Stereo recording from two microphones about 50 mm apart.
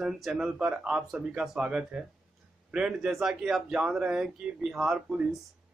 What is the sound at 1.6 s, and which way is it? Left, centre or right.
Speech, right.